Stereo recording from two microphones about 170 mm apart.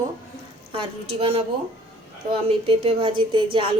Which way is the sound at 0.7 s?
35° right (ahead or behind).